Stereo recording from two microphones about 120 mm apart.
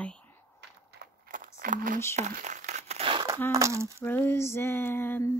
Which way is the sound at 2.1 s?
80° right.